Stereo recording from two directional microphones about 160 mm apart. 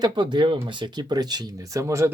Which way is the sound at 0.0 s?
25° right (ahead or behind).